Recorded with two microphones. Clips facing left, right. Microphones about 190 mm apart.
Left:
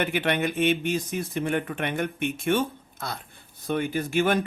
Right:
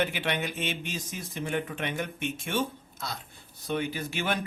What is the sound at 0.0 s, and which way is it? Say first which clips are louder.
Speech: left 4 dB; 55° left (ahead or behind).